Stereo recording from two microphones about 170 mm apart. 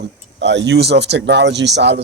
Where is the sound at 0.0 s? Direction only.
90° right.